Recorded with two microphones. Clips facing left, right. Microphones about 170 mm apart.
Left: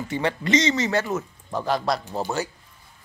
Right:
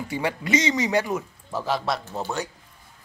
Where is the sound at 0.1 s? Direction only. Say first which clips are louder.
Left 2 dB; 10° right (ahead or behind).